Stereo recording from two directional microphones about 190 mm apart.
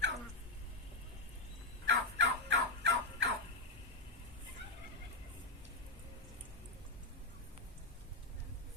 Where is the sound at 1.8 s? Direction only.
70° right (ahead or behind).